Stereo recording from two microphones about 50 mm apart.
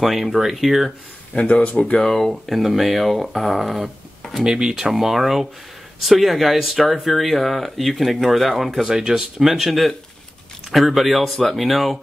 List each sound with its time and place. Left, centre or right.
0.0 s speech: centre
1.3 s speech: left
2.0 s speech: centre
4.5 s speech: centre